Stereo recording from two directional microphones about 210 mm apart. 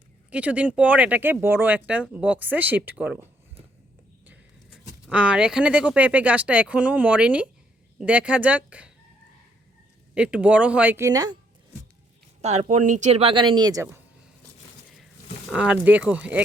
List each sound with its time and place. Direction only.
0.3 s speech: 5° right (ahead or behind)
5.0 s speech: 5° right (ahead or behind)
10.2 s speech: 5° right (ahead or behind)
12.4 s speech: 30° right (ahead or behind); by 14.0 s 15° right (ahead or behind)
15.4 s speech: 5° right (ahead or behind)